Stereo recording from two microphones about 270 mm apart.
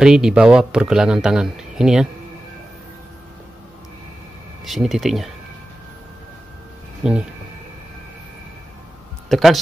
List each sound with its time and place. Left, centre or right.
0.0 s speech: centre
4.6 s speech: centre
7.0 s speech: centre
9.3 s speech: centre